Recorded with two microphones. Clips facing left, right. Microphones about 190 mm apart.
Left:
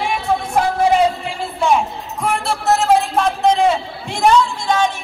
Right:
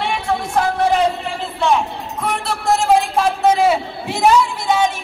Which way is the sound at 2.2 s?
5° left (ahead or behind).